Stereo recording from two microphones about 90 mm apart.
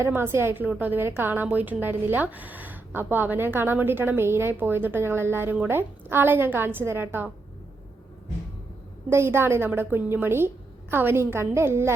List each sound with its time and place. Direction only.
0.0 s a woman's voice: 25° right (ahead or behind)
9.0 s a woman's voice: 30° right (ahead or behind)